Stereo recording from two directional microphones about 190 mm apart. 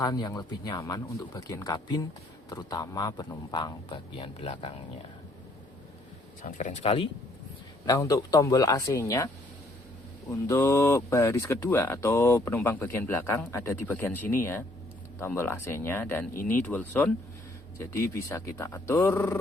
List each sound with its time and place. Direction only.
0.0 s a man's voice: 20° left (ahead or behind)
6.4 s speech: 40° left (ahead or behind)
7.9 s speech: 15° left (ahead or behind)
10.4 s speech: 15° left (ahead or behind)
16.3 s speech: 45° left (ahead or behind)
16.7 s speech: 10° left (ahead or behind)